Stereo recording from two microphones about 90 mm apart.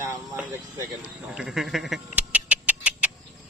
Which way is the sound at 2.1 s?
15° right (ahead or behind).